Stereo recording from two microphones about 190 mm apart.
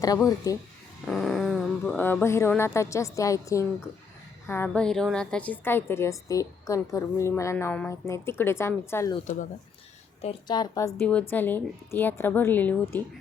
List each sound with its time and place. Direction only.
0.0 s a woman's voice: 20° left (ahead or behind)
1.0 s a woman's voice: centre (ahead or behind)
9.2 s speech: 40° left (ahead or behind)
10.4 s a woman's voice: 20° left (ahead or behind)
11.0 s a woman's voice: 5° left (ahead or behind)